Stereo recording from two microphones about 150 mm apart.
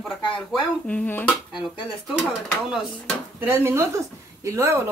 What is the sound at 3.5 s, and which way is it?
Speech, 15° right (ahead or behind).